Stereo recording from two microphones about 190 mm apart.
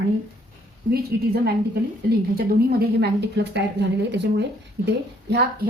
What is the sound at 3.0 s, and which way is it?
A woman's voice, 65° right (ahead or behind).